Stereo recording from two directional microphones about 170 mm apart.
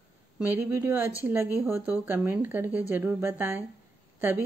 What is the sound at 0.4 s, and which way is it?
Speech, 10° right (ahead or behind).